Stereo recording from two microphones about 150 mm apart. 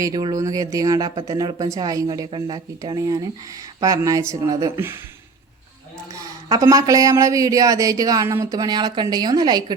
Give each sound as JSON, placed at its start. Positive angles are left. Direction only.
{"t": 0.0, "sound": "speech", "side_deg": -25}
{"t": 6.5, "sound": "speech", "side_deg": -25}